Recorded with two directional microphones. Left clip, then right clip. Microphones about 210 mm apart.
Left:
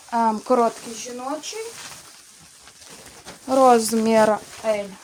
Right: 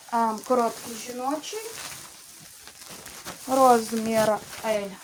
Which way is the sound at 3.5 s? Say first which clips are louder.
Left 4 dB; 45° left (ahead or behind).